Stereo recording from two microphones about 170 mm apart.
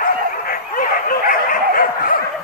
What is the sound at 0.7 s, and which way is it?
Dog, 55° left (ahead or behind).